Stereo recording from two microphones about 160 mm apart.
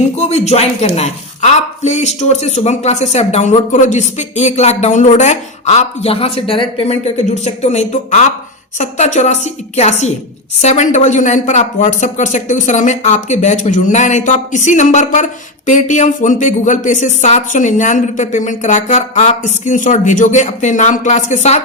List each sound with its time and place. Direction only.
0.2 s speech: 40° left (ahead or behind)